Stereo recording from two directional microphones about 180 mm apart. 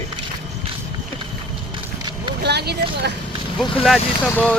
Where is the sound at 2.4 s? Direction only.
65° right (ahead or behind).